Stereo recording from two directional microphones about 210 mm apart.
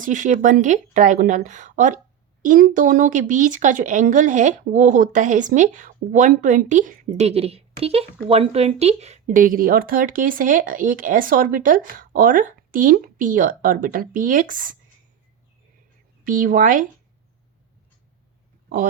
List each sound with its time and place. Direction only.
0.0 s speech: 35° right (ahead or behind)
16.2 s speech: 40° right (ahead or behind)